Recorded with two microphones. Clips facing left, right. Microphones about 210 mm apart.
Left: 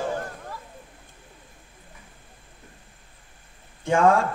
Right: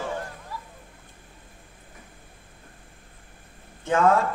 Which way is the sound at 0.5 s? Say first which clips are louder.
Right 2 dB; 50° left (ahead or behind).